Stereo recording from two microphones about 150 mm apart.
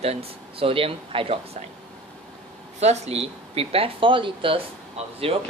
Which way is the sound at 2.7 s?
45° right (ahead or behind).